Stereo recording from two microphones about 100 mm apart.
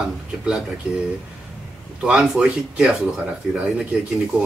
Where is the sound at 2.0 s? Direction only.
5° right (ahead or behind).